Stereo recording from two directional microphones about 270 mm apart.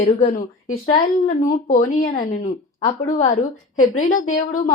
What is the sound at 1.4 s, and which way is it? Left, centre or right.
Speech, left.